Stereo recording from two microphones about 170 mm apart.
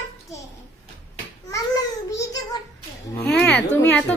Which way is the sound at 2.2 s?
20° left (ahead or behind).